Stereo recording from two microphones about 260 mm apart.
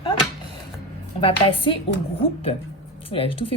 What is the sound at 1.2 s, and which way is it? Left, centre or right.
Speech, left.